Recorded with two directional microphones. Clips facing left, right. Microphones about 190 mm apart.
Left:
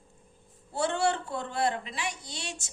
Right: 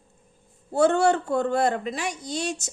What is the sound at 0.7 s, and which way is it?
A woman's voice, 45° right (ahead or behind).